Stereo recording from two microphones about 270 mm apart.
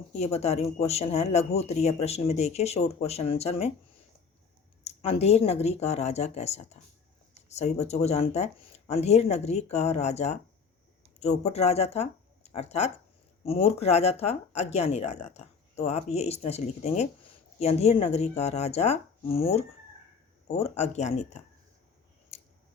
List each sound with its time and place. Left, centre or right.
0.2 s speech: left
4.8 s speech: left
22.3 s scissors: left